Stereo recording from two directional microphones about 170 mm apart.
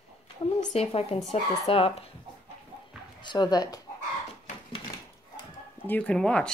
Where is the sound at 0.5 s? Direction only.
35° left (ahead or behind).